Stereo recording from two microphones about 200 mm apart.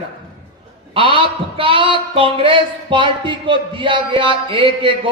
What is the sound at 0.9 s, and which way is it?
Speech, 25° right (ahead or behind).